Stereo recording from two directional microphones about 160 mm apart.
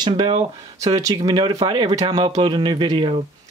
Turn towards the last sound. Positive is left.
turn(degrees=-35)  # may be behind; listen again after turning